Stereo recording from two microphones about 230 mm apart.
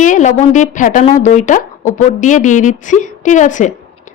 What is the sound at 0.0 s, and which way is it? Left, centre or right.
A woman's voice, left.